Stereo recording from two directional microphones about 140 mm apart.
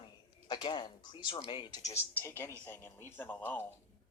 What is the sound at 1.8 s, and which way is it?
Speech, 25° left (ahead or behind).